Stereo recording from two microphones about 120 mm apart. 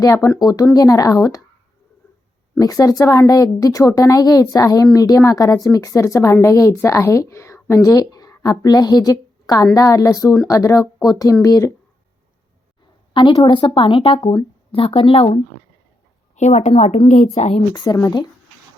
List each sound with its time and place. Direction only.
0.0 s a woman's voice: 30° left (ahead or behind)
2.6 s a woman's voice: 30° left (ahead or behind)
13.1 s speech: 40° left (ahead or behind)
16.3 s a woman's voice: 75° left (ahead or behind); by 17.6 s 60° left (ahead or behind)
17.7 s speech: 30° left (ahead or behind)